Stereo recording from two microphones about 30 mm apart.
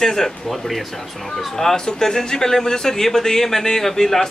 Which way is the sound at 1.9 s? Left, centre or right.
Centre.